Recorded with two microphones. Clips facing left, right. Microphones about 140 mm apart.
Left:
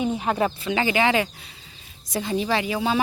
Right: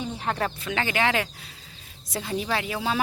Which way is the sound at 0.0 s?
15° left (ahead or behind).